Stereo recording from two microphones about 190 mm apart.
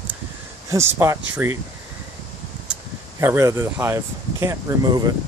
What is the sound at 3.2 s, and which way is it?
Speech, 15° right (ahead or behind).